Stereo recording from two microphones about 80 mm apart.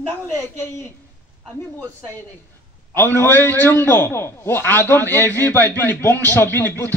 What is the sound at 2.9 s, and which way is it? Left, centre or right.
A man's voice, left.